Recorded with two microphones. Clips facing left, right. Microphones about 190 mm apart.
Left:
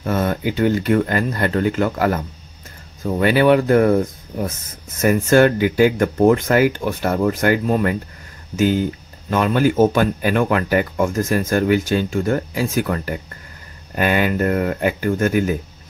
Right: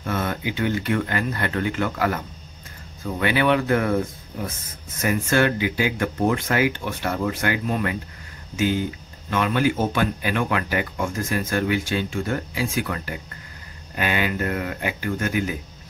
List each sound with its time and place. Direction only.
0.0 s speech: 40° left (ahead or behind)
3.2 s speech: 40° left (ahead or behind)
5.0 s speech: 45° left (ahead or behind)